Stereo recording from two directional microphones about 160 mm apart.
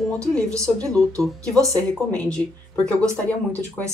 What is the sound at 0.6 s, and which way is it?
Speech, 5° left (ahead or behind).